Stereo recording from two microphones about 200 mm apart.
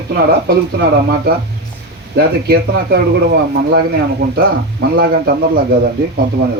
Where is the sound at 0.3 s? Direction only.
50° right (ahead or behind).